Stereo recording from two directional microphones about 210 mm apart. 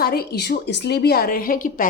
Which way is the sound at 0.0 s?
45° left (ahead or behind).